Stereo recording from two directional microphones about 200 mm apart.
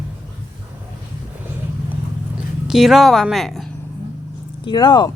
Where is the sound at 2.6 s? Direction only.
Centre (ahead or behind).